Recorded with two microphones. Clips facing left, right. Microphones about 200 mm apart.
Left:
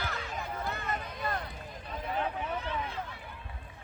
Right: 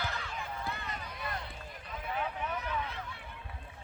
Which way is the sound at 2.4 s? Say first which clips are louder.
Left 1 dB; 30° left (ahead or behind).